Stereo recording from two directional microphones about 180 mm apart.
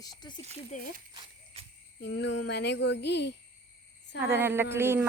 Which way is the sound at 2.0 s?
90° left.